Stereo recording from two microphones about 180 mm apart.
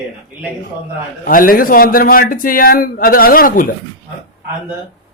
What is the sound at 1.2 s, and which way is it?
A man's voice, 50° left (ahead or behind).